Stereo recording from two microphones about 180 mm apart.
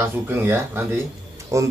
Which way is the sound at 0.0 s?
10° right (ahead or behind).